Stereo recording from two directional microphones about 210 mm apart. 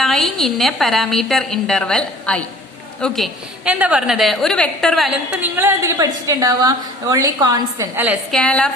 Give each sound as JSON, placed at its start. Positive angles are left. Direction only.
{"t": 0.0, "sound": "a woman's voice", "side_deg": 0}
{"t": 5.3, "sound": "a woman's voice", "side_deg": -10}
{"t": 8.4, "sound": "a woman's voice", "side_deg": 5}